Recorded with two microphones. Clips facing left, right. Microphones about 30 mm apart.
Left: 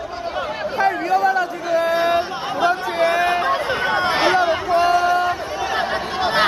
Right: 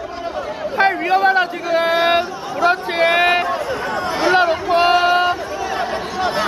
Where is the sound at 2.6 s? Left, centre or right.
Right.